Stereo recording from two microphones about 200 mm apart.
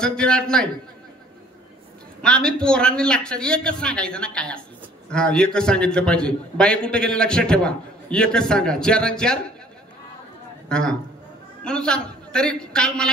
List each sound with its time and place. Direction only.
0.0 s a man's voice: 5° left (ahead or behind)
2.2 s a man's voice: 5° left (ahead or behind)
10.7 s a man's voice: 5° left (ahead or behind)